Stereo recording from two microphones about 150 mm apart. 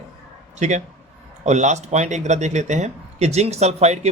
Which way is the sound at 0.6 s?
50° right (ahead or behind).